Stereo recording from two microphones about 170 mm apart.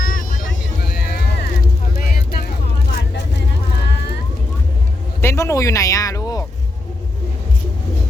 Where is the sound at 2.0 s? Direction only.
60° left (ahead or behind).